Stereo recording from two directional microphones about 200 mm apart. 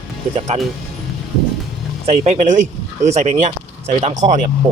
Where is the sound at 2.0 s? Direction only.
35° right (ahead or behind).